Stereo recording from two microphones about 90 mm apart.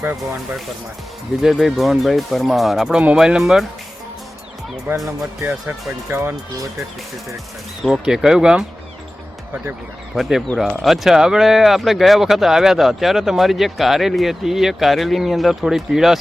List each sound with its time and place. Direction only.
1.6 s speech: centre (ahead or behind)
4.9 s speech: 25° right (ahead or behind)
7.8 s speech: centre (ahead or behind)
10.2 s speech: 5° right (ahead or behind)